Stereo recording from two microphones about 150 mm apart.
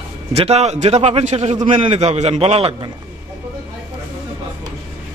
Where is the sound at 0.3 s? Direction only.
45° right (ahead or behind).